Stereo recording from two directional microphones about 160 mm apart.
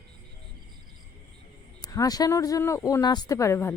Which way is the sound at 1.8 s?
20° left (ahead or behind).